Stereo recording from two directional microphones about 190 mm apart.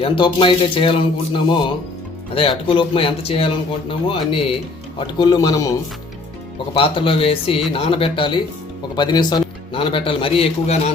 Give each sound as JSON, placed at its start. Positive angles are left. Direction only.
{"t": 0.0, "sound": "a man's voice", "side_deg": 25}
{"t": 6.7, "sound": "a man's voice", "side_deg": 30}